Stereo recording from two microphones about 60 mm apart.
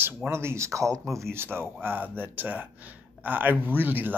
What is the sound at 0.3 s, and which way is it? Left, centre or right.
Speech, right.